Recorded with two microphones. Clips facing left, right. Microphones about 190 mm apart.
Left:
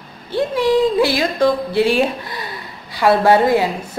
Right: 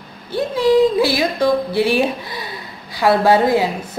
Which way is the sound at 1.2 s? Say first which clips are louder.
Even; 10° right (ahead or behind).